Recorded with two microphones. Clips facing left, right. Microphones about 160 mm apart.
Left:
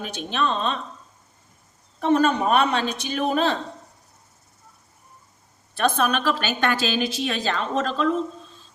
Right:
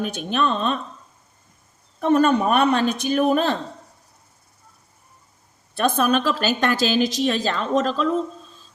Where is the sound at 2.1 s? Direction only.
50° right (ahead or behind).